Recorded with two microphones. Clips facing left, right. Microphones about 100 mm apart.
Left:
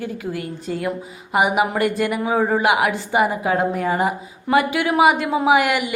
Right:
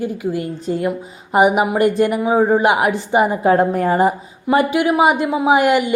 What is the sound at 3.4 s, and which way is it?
Speech, 40° right (ahead or behind).